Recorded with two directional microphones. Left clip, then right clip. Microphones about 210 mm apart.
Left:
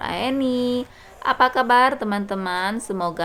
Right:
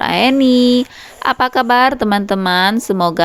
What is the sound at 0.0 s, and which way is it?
Speech, 35° right (ahead or behind).